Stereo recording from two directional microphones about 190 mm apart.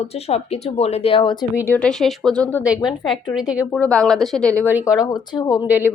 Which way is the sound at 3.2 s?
5° right (ahead or behind).